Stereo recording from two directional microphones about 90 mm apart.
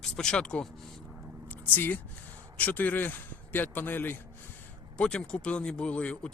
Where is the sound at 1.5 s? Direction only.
20° left (ahead or behind).